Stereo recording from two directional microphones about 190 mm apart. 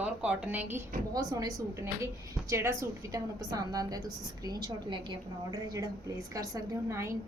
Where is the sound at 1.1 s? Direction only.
20° right (ahead or behind).